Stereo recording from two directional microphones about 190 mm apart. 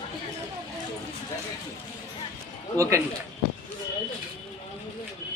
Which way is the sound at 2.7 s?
15° right (ahead or behind).